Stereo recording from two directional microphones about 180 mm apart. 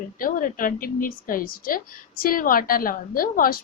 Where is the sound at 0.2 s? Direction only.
50° left (ahead or behind).